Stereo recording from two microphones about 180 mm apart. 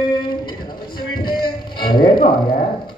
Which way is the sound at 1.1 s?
25° left (ahead or behind).